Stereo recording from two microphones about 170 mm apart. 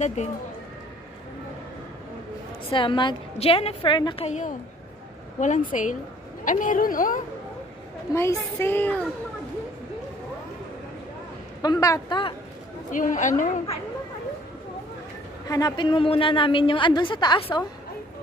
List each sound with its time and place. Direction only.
0.0 s a woman's voice: 40° left (ahead or behind)
2.7 s a woman's voice: 30° left (ahead or behind)
4.3 s a woman's voice: 45° left (ahead or behind)
8.1 s a woman's voice: 15° left (ahead or behind)
11.6 s a woman's voice: 20° left (ahead or behind)
12.9 s a woman's voice: 50° left (ahead or behind)
15.4 s a woman's voice: 20° left (ahead or behind)